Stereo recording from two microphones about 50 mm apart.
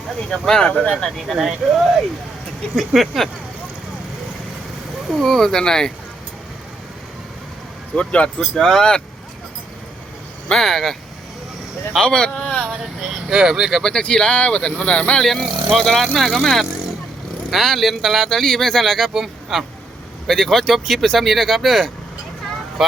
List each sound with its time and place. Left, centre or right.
0.3 s speech: centre
0.7 s speech: left
1.4 s speech: centre
5.2 s speech: centre
7.9 s speech: left
8.4 s speech: centre
10.5 s speech: centre
11.9 s speech: centre
13.2 s speech: centre
14.0 s speech: centre
15.2 s speech: centre
20.2 s speech: centre